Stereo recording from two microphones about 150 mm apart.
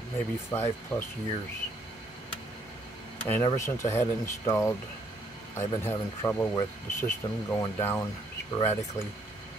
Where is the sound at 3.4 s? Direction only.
20° left (ahead or behind).